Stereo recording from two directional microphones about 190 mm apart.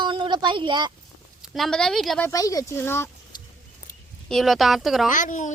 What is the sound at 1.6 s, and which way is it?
Speech, centre (ahead or behind).